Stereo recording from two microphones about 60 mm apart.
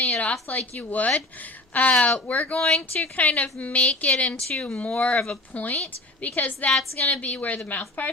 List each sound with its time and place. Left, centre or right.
0.0 s speech: left
2.6 s a woman's voice: centre
3.2 s speech: left
6.7 s a woman's voice: centre